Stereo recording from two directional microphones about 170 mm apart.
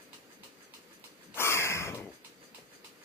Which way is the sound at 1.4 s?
15° left (ahead or behind).